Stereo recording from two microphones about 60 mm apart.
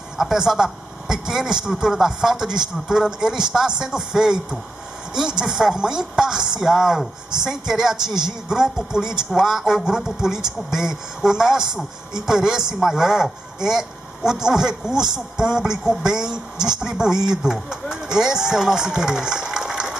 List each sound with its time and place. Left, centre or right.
0.2 s speech: centre